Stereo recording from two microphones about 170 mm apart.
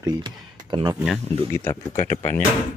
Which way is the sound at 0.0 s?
25° right (ahead or behind).